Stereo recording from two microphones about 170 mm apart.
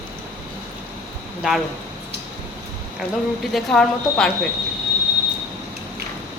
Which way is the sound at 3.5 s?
5° left (ahead or behind).